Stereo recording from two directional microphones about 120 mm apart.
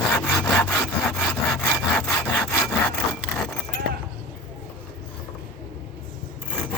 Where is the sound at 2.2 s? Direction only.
15° left (ahead or behind).